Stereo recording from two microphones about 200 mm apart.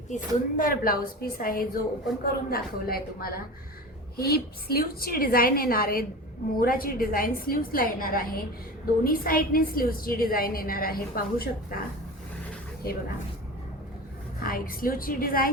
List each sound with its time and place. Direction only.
0.1 s a woman's voice: 45° left (ahead or behind)
14.4 s a woman's voice: 45° left (ahead or behind)